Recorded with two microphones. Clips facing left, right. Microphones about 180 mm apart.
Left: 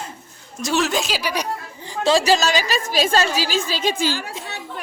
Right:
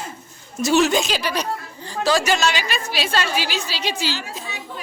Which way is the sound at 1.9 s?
25° left (ahead or behind).